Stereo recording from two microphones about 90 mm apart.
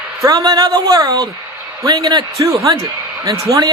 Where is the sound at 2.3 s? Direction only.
35° right (ahead or behind).